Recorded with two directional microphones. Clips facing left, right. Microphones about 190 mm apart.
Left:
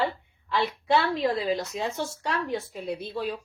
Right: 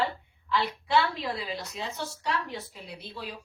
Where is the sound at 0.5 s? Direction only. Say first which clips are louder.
Left 2 dB; 45° left (ahead or behind).